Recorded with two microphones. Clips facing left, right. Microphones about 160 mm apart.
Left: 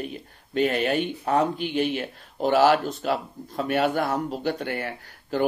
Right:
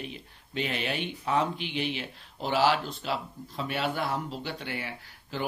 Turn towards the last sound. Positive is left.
turn(degrees=45)  # may be behind; listen again after turning